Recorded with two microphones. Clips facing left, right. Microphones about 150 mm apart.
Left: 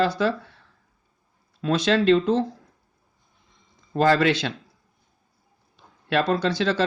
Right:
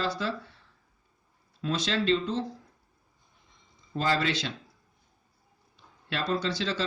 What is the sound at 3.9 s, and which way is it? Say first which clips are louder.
Speech: left 8 dB; 60° left (ahead or behind).